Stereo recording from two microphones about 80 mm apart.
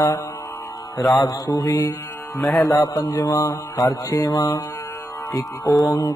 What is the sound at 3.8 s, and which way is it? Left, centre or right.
Mantra, left.